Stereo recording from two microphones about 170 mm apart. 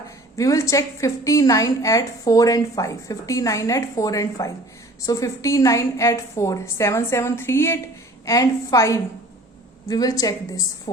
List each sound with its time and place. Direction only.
0.3 s a woman's voice: 20° left (ahead or behind)